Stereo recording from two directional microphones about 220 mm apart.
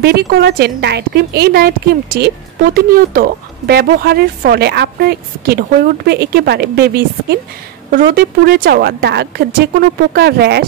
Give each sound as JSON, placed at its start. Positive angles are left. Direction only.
{"t": 0.0, "sound": "speech", "side_deg": -45}